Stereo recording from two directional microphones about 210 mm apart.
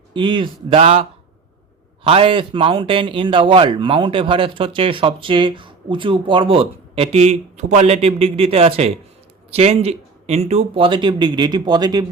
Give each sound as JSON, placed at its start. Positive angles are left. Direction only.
{"t": 0.1, "sound": "a man's voice", "side_deg": -20}
{"t": 2.0, "sound": "a man's voice", "side_deg": -25}